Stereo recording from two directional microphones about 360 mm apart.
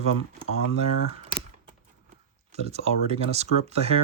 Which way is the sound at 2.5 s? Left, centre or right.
Centre.